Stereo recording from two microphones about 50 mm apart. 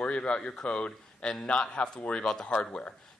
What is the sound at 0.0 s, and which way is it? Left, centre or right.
Speech, left.